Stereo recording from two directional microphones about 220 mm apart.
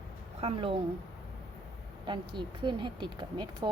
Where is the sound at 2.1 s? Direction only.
20° right (ahead or behind).